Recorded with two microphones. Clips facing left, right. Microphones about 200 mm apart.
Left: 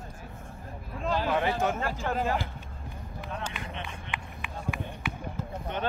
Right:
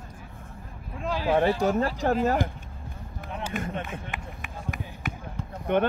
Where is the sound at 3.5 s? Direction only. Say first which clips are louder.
Right 7 dB; 45° right (ahead or behind).